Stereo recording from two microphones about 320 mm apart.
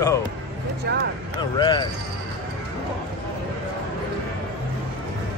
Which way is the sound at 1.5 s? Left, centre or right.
Centre.